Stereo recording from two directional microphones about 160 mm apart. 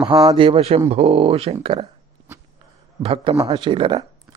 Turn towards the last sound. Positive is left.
turn(degrees=-30)  # may be behind; listen again after turning